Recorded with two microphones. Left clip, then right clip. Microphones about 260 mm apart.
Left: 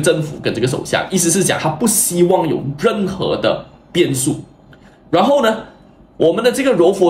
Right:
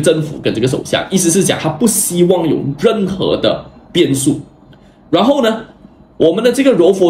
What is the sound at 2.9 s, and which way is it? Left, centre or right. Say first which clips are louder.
Speech: right 3 dB; right.